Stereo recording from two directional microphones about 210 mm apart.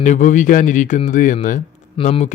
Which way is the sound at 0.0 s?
35° left (ahead or behind).